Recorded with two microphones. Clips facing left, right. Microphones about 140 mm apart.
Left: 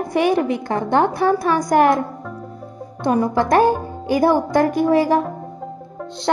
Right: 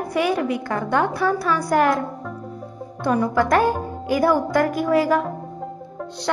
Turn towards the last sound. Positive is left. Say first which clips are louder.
# left 3 dB
turn(degrees=30)  # may be behind; listen again after turning